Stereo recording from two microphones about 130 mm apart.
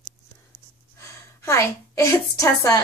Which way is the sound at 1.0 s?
25° left (ahead or behind).